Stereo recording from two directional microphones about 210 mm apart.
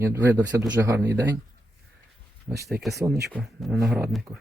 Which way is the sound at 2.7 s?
45° right (ahead or behind).